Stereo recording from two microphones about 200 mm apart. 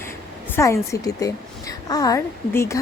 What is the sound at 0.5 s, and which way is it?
Speech, 15° left (ahead or behind).